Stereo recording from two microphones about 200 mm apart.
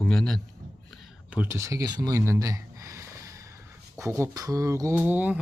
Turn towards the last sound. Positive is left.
turn(degrees=-10)  # may be behind; listen again after turning